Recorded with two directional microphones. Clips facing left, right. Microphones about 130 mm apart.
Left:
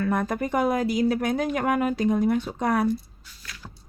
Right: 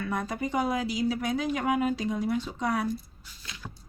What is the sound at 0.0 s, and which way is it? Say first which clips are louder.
Speech: left 6 dB; 50° left (ahead or behind).